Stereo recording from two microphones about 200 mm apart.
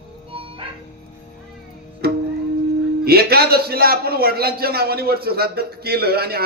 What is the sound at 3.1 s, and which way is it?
A man's voice, 50° right (ahead or behind).